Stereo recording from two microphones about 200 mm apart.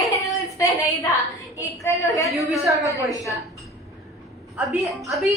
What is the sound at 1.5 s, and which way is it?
Speech, 15° left (ahead or behind).